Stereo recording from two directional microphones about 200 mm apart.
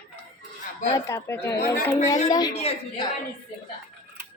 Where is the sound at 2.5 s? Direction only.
30° left (ahead or behind).